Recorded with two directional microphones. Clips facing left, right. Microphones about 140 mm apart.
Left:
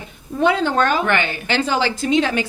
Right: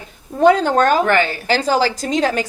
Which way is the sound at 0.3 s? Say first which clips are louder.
Right 4 dB; 40° right (ahead or behind).